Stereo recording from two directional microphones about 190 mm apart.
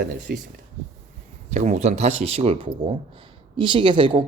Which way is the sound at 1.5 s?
40° right (ahead or behind).